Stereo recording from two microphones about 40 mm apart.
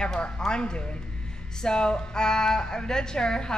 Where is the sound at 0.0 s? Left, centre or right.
Centre.